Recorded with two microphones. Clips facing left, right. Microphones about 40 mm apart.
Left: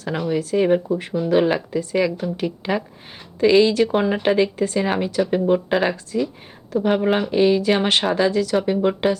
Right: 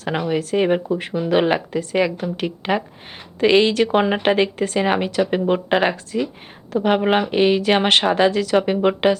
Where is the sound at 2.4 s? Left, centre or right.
Right.